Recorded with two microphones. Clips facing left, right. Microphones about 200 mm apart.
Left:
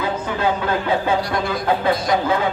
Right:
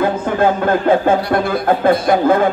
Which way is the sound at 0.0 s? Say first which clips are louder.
Right 7 dB; 50° right (ahead or behind).